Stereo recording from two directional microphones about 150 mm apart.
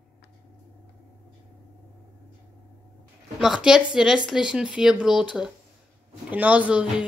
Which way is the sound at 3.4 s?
5° right (ahead or behind).